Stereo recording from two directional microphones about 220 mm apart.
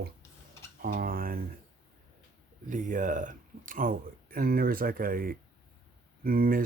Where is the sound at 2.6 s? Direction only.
35° right (ahead or behind).